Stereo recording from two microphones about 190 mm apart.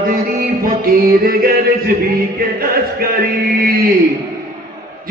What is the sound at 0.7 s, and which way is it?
Speech, 50° right (ahead or behind).